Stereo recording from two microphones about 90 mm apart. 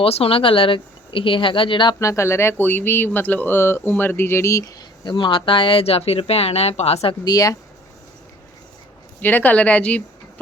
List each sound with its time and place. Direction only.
0.0 s speech: 90° left; by 2.0 s 65° left (ahead or behind)
2.0 s speech: 35° left (ahead or behind)
5.0 s speech: 65° left (ahead or behind); by 7.2 s 90° left
7.3 s speech: 40° left (ahead or behind)
9.2 s speech: 20° left (ahead or behind)